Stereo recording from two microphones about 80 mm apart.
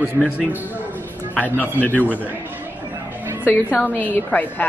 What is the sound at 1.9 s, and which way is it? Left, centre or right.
Speech, right.